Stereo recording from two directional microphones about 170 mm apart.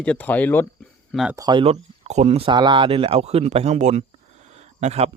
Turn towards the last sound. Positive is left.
turn(degrees=-40)  # may be behind; listen again after turning